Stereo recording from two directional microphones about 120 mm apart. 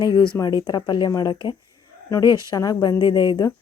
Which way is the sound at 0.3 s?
20° left (ahead or behind).